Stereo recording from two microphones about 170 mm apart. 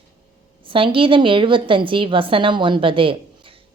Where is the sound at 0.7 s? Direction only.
30° right (ahead or behind).